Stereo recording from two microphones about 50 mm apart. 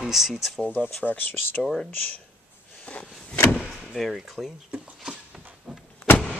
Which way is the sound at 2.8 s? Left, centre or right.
Left.